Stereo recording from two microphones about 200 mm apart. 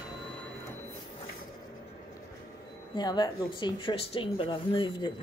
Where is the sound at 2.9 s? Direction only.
20° left (ahead or behind).